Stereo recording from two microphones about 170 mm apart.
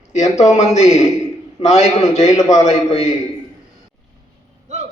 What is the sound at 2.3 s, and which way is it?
Speech, 20° left (ahead or behind).